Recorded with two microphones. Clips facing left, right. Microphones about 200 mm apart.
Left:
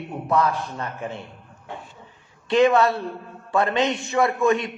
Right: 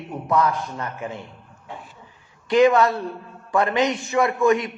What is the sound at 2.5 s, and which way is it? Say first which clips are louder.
A man's voice: right 1 dB; 25° left (ahead or behind).